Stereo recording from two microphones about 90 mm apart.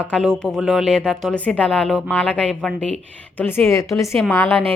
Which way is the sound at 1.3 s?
15° left (ahead or behind).